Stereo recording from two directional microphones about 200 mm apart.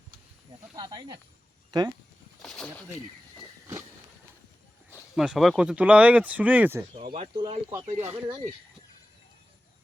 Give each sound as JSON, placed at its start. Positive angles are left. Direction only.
{"t": 0.8, "sound": "speech", "side_deg": -20}
{"t": 2.4, "sound": "a sound", "side_deg": 5}
{"t": 5.1, "sound": "speech", "side_deg": -5}
{"t": 6.9, "sound": "speech", "side_deg": -25}
{"t": 7.7, "sound": "speech", "side_deg": -15}